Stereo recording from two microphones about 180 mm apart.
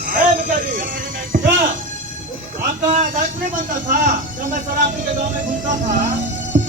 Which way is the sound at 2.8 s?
45° right (ahead or behind).